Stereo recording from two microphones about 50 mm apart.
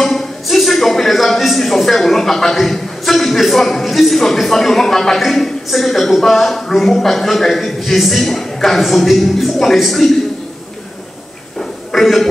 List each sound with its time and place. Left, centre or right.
0.0 s speech: centre
11.9 s speech: centre